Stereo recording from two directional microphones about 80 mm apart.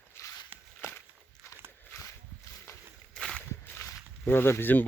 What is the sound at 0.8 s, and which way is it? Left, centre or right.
Walk, left.